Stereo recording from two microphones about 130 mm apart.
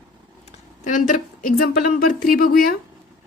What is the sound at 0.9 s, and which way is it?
A woman's voice, 80° left.